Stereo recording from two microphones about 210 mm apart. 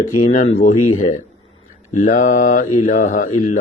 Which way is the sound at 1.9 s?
35° left (ahead or behind).